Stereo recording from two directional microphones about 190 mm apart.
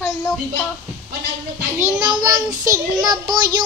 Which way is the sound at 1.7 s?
15° right (ahead or behind).